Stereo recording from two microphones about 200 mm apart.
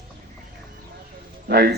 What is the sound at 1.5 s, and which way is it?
Speech, 50° right (ahead or behind).